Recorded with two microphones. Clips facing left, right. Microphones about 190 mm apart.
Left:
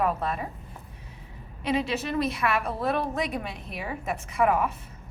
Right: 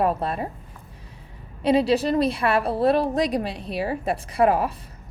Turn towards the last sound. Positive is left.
turn(degrees=-30)  # may be behind; listen again after turning